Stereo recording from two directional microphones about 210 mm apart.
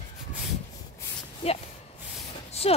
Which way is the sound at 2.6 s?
30° left (ahead or behind).